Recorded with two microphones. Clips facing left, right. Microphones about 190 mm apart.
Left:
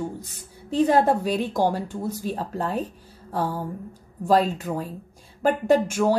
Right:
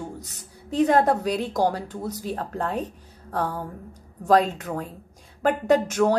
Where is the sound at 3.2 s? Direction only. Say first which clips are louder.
Left 1 dB; 5° left (ahead or behind).